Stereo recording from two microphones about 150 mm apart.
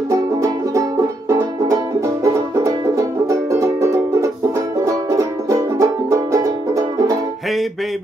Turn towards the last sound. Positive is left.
turn(degrees=-20)  # may be behind; listen again after turning